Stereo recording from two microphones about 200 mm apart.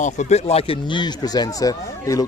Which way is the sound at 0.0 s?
35° left (ahead or behind).